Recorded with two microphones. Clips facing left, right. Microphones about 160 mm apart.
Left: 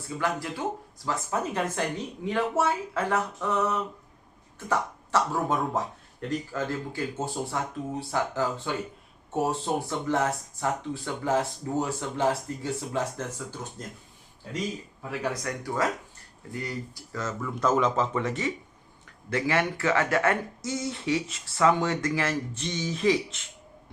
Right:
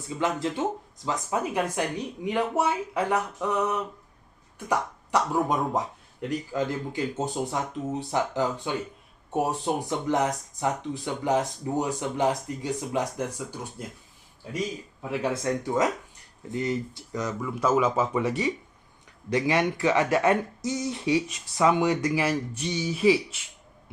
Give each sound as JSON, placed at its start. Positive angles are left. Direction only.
{"t": 0.2, "sound": "speech", "side_deg": -20}
{"t": 15.2, "sound": "speech", "side_deg": -25}